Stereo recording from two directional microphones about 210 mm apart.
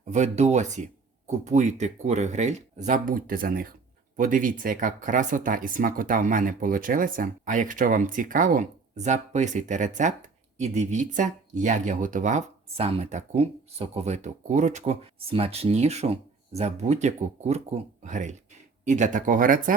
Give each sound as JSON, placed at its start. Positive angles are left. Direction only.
{"t": 0.0, "sound": "speech", "side_deg": -35}